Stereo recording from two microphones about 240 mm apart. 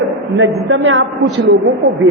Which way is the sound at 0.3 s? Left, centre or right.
Right.